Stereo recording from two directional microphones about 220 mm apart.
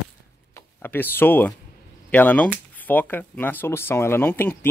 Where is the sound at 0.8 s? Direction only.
10° left (ahead or behind).